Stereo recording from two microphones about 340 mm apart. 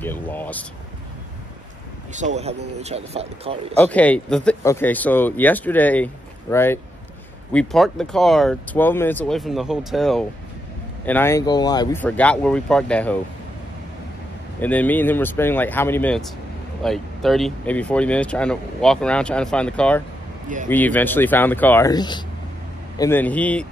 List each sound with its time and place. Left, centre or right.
0.0 s speech: centre
2.1 s speech: centre
3.8 s speech: centre
14.6 s a man's voice: centre